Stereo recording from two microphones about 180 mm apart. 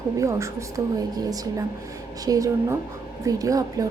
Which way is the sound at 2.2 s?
20° right (ahead or behind).